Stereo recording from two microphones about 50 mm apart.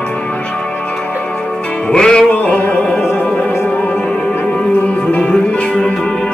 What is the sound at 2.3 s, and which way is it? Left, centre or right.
Music, left.